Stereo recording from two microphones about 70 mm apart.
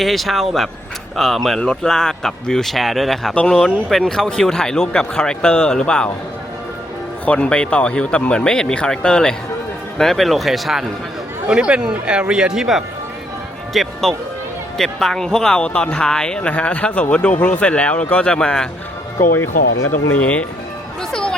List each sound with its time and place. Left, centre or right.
0.0 s speech: centre
7.3 s speech: centre
11.4 s speech: centre
13.7 s speech: centre
20.1 s speech: centre
21.1 s chatter: centre